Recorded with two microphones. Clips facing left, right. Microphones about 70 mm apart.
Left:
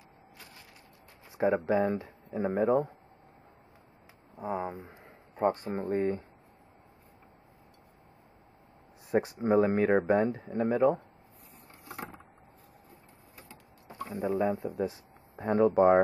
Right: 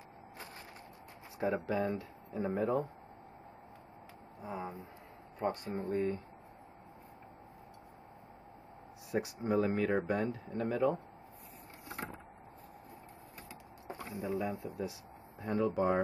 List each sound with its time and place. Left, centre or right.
1.4 s speech: left
1.9 s speech: left
2.4 s speech: left
4.6 s speech: left
9.1 s speech: left
14.0 s speech: left